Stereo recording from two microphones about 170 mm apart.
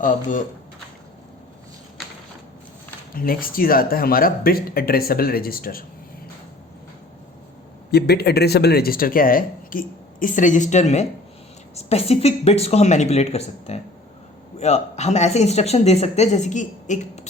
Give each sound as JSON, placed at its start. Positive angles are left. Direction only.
{"t": 0.0, "sound": "speech", "side_deg": 50}
{"t": 3.2, "sound": "speech", "side_deg": 55}
{"t": 7.9, "sound": "speech", "side_deg": 70}